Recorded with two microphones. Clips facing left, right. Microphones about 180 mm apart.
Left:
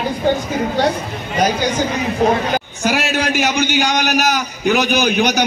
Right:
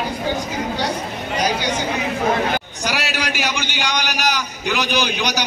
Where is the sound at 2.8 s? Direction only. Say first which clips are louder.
Left 7 dB; 50° left (ahead or behind).